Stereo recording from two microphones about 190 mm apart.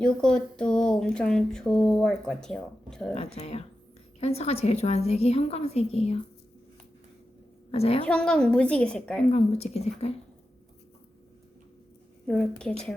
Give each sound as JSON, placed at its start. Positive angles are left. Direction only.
{"t": 0.0, "sound": "speech", "side_deg": 5}
{"t": 3.2, "sound": "a woman's voice", "side_deg": 35}
{"t": 7.7, "sound": "a woman's voice", "side_deg": 30}
{"t": 8.0, "sound": "speech", "side_deg": 5}
{"t": 9.3, "sound": "a woman's voice", "side_deg": 35}
{"t": 12.2, "sound": "speech", "side_deg": 5}